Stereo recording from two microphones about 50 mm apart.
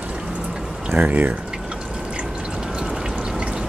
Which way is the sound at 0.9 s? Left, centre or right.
Right.